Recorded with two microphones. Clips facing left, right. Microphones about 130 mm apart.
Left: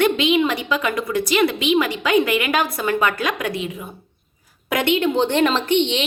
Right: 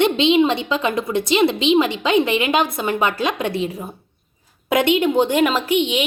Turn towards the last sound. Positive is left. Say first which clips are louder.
# even
turn(degrees=-5)  # may be behind; listen again after turning